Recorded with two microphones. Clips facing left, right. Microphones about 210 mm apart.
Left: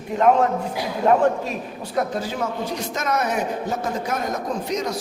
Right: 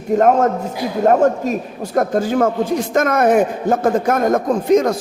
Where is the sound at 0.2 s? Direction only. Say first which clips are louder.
Right 2 dB; 45° right (ahead or behind).